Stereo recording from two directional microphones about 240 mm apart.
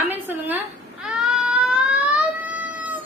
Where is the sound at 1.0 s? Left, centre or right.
Centre.